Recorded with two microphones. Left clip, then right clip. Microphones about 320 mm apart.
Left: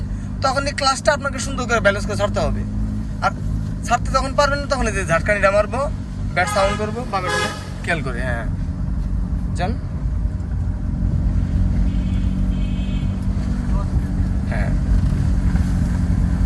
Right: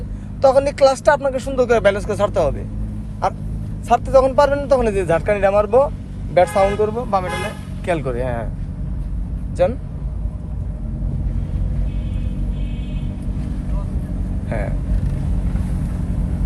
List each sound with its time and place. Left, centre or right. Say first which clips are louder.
0.4 s speech: right 6 dB; centre
3.8 s speech: right 6 dB; centre
9.6 s speech: right 9 dB; centre